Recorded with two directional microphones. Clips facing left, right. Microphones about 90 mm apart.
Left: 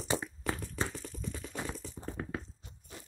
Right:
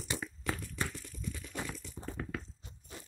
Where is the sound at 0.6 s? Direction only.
35° left (ahead or behind).